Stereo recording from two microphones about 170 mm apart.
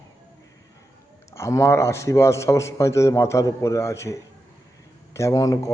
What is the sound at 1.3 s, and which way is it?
A man's voice, 15° left (ahead or behind).